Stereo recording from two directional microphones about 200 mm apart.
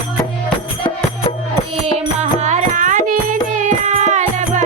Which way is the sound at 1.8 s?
30° right (ahead or behind).